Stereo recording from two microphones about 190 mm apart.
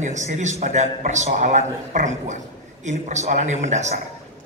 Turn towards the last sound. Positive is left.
turn(degrees=-40)  # may be behind; listen again after turning